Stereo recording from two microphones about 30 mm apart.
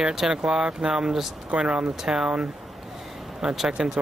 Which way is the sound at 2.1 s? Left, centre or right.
Right.